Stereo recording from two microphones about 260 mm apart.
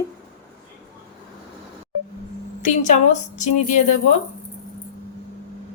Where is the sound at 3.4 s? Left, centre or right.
Left.